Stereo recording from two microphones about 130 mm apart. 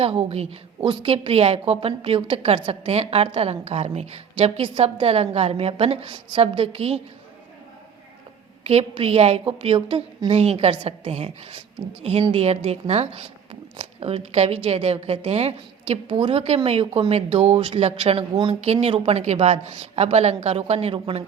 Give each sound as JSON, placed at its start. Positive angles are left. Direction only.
{"t": 0.0, "sound": "a woman's voice", "side_deg": -50}
{"t": 8.6, "sound": "a woman's voice", "side_deg": -50}